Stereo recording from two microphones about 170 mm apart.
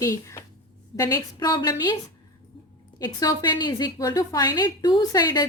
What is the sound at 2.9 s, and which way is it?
A woman's voice, 25° left (ahead or behind).